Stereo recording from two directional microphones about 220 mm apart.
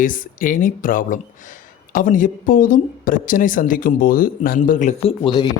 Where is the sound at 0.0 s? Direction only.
35° left (ahead or behind).